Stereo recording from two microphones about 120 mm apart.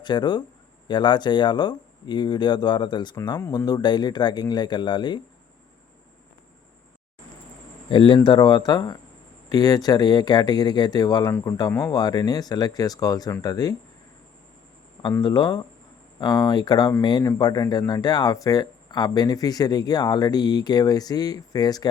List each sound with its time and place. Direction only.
0.0 s speech: 40° left (ahead or behind)
7.9 s speech: 45° left (ahead or behind)
15.2 s speech: 35° left (ahead or behind)